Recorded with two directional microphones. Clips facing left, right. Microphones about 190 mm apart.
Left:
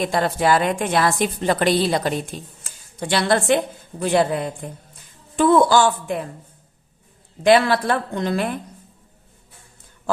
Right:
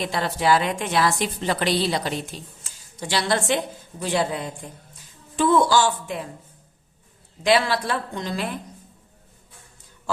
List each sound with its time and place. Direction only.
0.0 s a woman's voice: 50° left (ahead or behind)
7.4 s a woman's voice: 55° left (ahead or behind)